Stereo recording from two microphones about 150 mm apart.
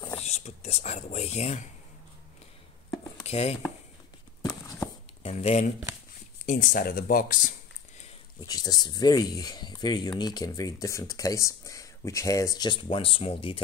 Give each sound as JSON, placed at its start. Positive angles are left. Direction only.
{"t": 0.1, "sound": "speech", "side_deg": 45}
{"t": 3.3, "sound": "speech", "side_deg": 45}
{"t": 5.2, "sound": "speech", "side_deg": 45}
{"t": 8.5, "sound": "speech", "side_deg": 25}